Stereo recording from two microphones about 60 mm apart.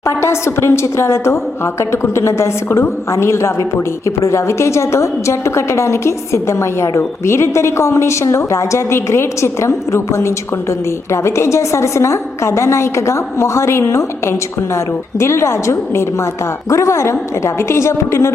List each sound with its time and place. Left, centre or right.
0.0 s a woman's voice: left